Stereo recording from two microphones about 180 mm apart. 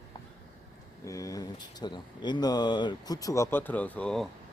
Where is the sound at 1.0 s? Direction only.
20° left (ahead or behind).